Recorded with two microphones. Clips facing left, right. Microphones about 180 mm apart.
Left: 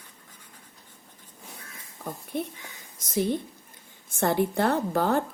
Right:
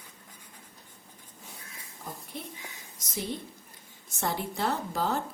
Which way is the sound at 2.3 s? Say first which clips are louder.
Left 11 dB; 55° left (ahead or behind).